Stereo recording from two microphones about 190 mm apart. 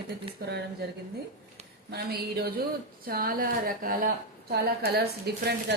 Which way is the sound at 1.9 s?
55° right (ahead or behind).